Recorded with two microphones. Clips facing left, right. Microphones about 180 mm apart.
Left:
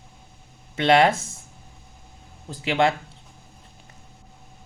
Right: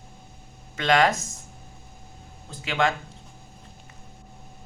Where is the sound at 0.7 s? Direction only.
30° left (ahead or behind).